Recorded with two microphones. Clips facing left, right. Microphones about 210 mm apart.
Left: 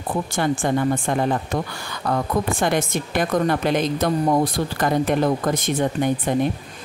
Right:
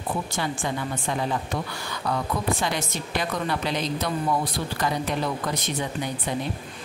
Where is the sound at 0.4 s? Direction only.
50° left (ahead or behind).